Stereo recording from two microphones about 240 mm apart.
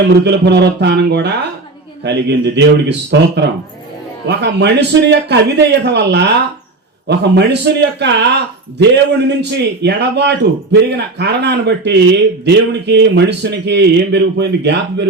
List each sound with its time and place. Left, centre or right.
0.3 s a man's voice: right
9.4 s a man's voice: right